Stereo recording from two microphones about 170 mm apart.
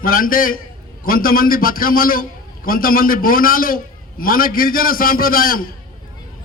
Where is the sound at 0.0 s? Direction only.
55° left (ahead or behind).